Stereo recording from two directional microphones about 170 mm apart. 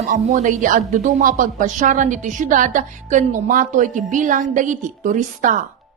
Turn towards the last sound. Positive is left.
turn(degrees=-50)  # may be behind; listen again after turning